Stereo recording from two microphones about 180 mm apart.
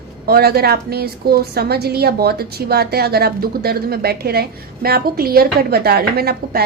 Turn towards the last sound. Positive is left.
turn(degrees=-60)  # may be behind; listen again after turning